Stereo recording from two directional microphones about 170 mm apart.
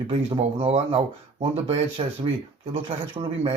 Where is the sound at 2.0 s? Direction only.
30° right (ahead or behind).